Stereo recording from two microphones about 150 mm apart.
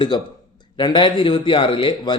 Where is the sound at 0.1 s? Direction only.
30° left (ahead or behind).